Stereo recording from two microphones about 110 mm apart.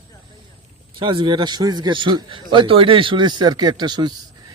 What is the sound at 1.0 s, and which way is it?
A man's voice, 45° right (ahead or behind).